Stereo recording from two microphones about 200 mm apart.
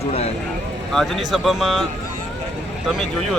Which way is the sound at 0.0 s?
30° left (ahead or behind).